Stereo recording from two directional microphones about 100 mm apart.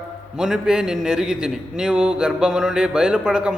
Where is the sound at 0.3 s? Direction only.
5° right (ahead or behind).